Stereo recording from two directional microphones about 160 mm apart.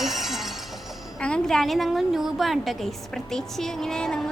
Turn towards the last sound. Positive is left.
turn(degrees=5)  # may be behind; listen again after turning